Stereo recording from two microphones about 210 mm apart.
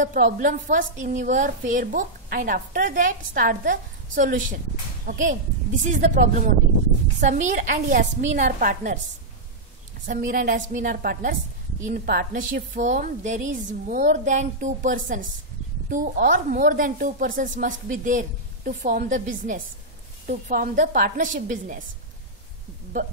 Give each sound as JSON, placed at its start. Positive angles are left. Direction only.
{"t": 0.0, "sound": "a woman's voice", "side_deg": -40}
{"t": 10.0, "sound": "a woman's voice", "side_deg": -40}
{"t": 23.0, "sound": "a woman's voice", "side_deg": -35}